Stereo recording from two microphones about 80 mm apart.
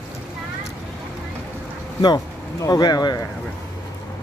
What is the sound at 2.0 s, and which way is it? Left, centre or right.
Speech, left.